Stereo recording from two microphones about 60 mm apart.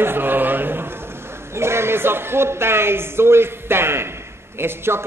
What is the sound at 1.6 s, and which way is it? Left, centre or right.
A man's voice, right.